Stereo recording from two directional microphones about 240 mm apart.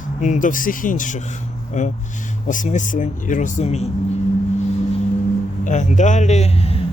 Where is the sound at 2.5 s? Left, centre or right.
Left.